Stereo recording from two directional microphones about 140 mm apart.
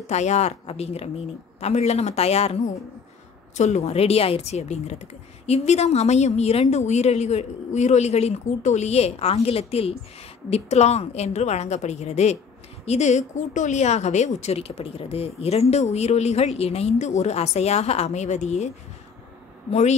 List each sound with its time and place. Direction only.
0.0 s a woman's voice: 55° left (ahead or behind)